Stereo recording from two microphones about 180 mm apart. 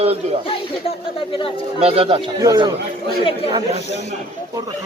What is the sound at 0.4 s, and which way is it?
Speech, 30° left (ahead or behind).